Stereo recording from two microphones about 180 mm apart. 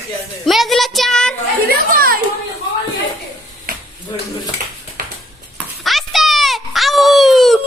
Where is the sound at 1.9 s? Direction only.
55° right (ahead or behind).